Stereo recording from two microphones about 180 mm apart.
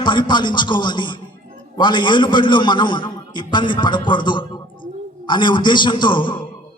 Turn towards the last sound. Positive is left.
turn(degrees=25)  # may be behind; listen again after turning